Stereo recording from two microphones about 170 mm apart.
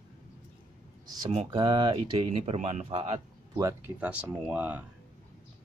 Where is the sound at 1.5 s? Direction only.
25° right (ahead or behind).